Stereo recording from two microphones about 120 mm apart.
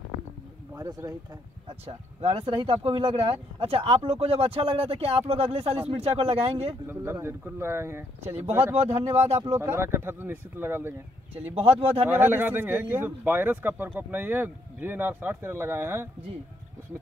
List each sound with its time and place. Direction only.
0.7 s speech: 25° right (ahead or behind)
2.2 s speech: 50° right (ahead or behind)
6.9 s speech: 20° right (ahead or behind)
8.7 s speech: 65° right (ahead or behind)
9.6 s speech: 20° right (ahead or behind)